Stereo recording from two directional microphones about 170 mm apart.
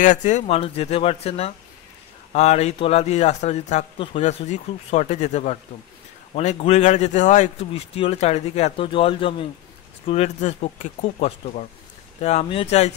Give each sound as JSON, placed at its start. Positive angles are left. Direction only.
{"t": 0.0, "sound": "speech", "side_deg": 45}